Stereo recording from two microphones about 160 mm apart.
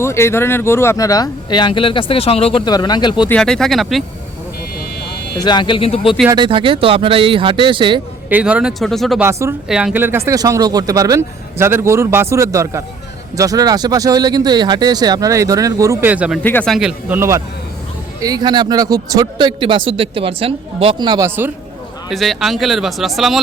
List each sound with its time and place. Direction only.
0.0 s speech: 15° left (ahead or behind)
3.2 s speech: 5° left (ahead or behind)
5.4 s speech: 25° left (ahead or behind)
6.3 s speech: 30° right (ahead or behind)
8.3 s speech: 10° right (ahead or behind)
9.2 s speech: 15° right (ahead or behind)
9.6 s speech: 5° right (ahead or behind)
16.4 s speech: 10° left (ahead or behind)
16.7 s speech: 5° right (ahead or behind)
17.2 s speech: 15° right (ahead or behind)
21.2 s speech: 15° right (ahead or behind)
22.1 s speech: centre (ahead or behind)